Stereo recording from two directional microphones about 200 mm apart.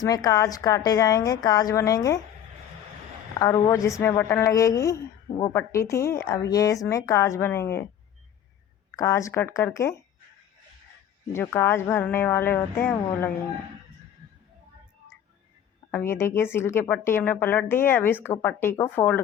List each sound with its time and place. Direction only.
0.0 s speech: 20° left (ahead or behind)
3.3 s speech: 15° left (ahead or behind)
9.0 s speech: 15° left (ahead or behind)
11.3 s speech: 10° left (ahead or behind)
15.9 s speech: 10° left (ahead or behind)